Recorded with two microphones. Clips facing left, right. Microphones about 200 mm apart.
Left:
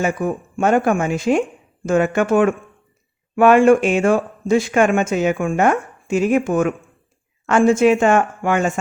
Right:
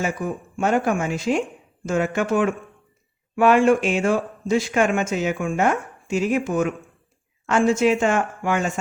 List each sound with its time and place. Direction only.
0.0 s speech: 55° left (ahead or behind)